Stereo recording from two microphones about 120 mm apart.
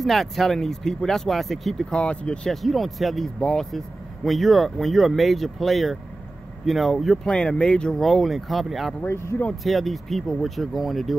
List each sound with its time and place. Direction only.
0.0 s speech: centre (ahead or behind)
9.0 s speech: 20° left (ahead or behind)
9.5 s speech: centre (ahead or behind)